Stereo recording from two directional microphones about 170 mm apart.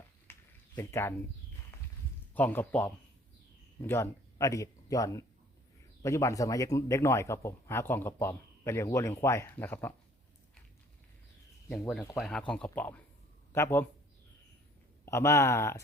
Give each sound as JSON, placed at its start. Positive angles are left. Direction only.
{"t": 0.3, "sound": "a sound", "side_deg": 15}
{"t": 0.8, "sound": "a man's voice", "side_deg": 15}
{"t": 1.7, "sound": "a sound", "side_deg": 15}
{"t": 2.3, "sound": "a man's voice", "side_deg": 10}
{"t": 11.7, "sound": "a man's voice", "side_deg": 5}
{"t": 15.0, "sound": "a man's voice", "side_deg": 15}